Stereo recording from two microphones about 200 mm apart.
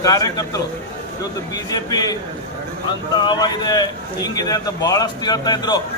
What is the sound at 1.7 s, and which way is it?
Speech, 20° left (ahead or behind).